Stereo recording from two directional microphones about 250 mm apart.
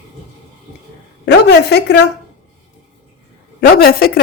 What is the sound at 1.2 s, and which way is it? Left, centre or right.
Speech, left.